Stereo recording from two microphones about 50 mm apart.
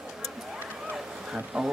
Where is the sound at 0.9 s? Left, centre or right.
Centre.